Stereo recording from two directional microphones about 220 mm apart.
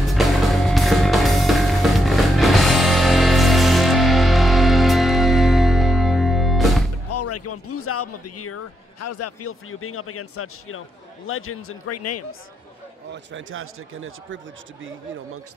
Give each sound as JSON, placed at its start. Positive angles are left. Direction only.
{"t": 0.1, "sound": "music", "side_deg": 0}
{"t": 7.1, "sound": "music", "side_deg": 90}
{"t": 9.2, "sound": "a man's voice", "side_deg": 80}
{"t": 11.2, "sound": "a man's voice", "side_deg": 70}
{"t": 13.1, "sound": "speech", "side_deg": -60}